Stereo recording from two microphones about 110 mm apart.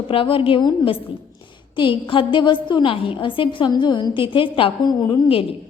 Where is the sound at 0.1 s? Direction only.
55° left (ahead or behind).